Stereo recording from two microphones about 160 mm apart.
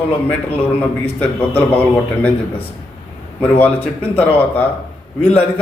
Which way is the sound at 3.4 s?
10° left (ahead or behind).